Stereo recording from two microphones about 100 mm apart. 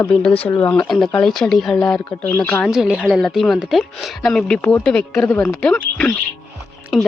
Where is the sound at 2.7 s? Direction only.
5° right (ahead or behind).